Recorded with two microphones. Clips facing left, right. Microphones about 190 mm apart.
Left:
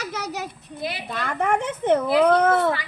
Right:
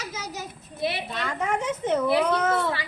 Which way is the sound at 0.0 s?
65° left (ahead or behind).